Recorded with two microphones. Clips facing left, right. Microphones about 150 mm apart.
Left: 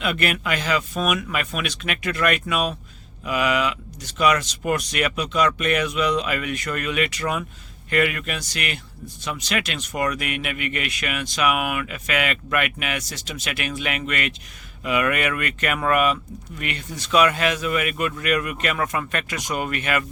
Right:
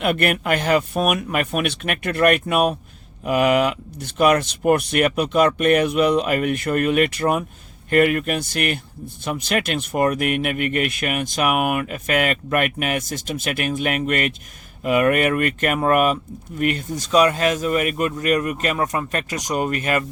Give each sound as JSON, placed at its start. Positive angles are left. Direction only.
{"t": 0.0, "sound": "speech", "side_deg": -50}